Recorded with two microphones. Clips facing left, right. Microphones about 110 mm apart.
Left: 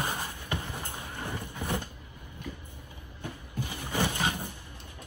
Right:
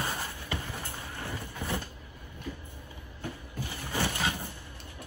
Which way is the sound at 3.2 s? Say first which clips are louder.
Left 1 dB; 15° left (ahead or behind).